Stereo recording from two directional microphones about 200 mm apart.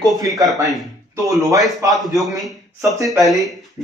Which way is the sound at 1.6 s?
Centre (ahead or behind).